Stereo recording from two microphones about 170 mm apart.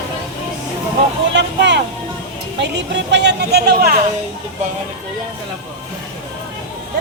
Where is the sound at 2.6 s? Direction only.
90° right; by 4.0 s 65° right (ahead or behind).